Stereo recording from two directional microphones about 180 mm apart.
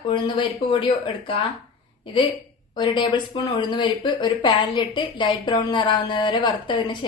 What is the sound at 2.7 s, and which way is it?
Speech, 25° left (ahead or behind).